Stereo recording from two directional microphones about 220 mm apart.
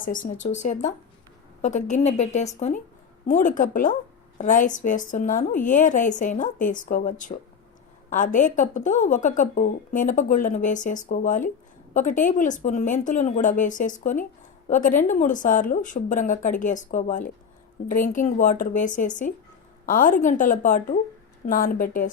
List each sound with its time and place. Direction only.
0.0 s speech: 35° left (ahead or behind)